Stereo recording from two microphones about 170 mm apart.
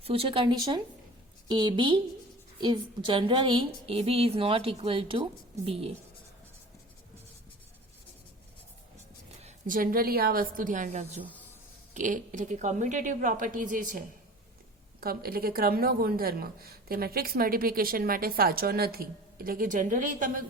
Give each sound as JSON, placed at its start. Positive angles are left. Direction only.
{"t": 0.0, "sound": "a woman's voice", "side_deg": -35}
{"t": 9.4, "sound": "a woman's voice", "side_deg": -45}
{"t": 15.0, "sound": "a woman's voice", "side_deg": -60}